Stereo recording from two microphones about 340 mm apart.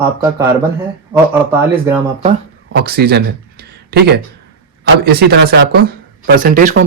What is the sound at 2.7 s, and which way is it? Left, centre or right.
Speech, right.